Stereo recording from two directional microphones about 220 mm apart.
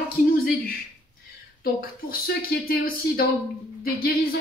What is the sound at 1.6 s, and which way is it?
Speech, 40° left (ahead or behind).